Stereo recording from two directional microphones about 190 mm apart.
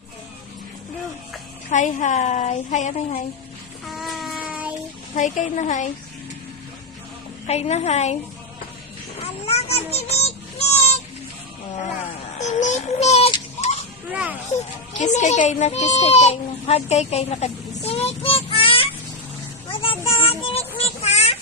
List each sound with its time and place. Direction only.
1.7 s a woman's voice: 40° left (ahead or behind)
3.8 s child singing: centre (ahead or behind)
5.1 s a woman's voice: 40° left (ahead or behind)
7.4 s a woman's voice: 35° left (ahead or behind)
9.5 s child singing: 35° left (ahead or behind)
12.4 s a sound: 40° left (ahead or behind)
14.1 s speech: 5° right (ahead or behind)
14.9 s a child's voice: 40° left (ahead or behind)
19.7 s child singing: 30° left (ahead or behind)